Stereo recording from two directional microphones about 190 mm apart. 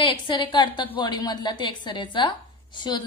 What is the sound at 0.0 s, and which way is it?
A woman's voice, 25° left (ahead or behind).